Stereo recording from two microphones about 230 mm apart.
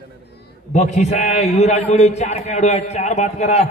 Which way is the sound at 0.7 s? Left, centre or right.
Left.